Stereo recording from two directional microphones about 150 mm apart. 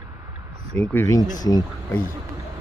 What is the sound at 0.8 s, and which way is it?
Speech, 15° left (ahead or behind).